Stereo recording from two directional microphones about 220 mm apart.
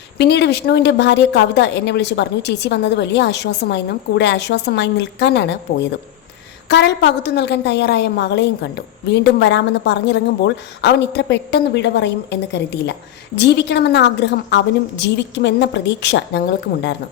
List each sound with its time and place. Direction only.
0.2 s a woman's voice: 50° left (ahead or behind)
6.7 s a woman's voice: 55° left (ahead or behind)